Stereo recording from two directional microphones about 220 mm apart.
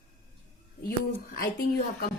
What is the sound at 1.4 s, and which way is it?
Speech, 45° left (ahead or behind).